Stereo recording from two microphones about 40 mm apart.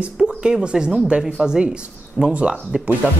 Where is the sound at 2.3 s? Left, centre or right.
Right.